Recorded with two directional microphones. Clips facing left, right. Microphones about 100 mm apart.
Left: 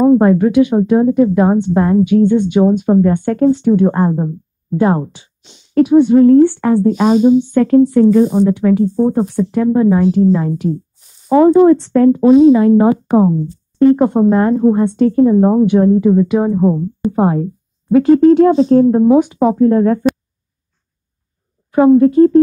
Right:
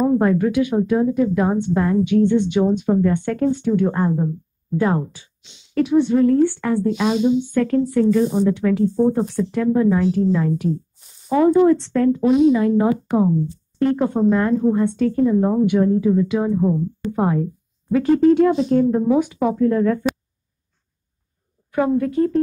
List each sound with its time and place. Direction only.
0.0 s a woman's voice: 35° left (ahead or behind)
7.5 s a woman's voice: 30° left (ahead or behind)
8.4 s a woman's voice: 20° left (ahead or behind)
11.2 s a woman's voice: 35° left (ahead or behind)
21.7 s a woman's voice: 30° left (ahead or behind)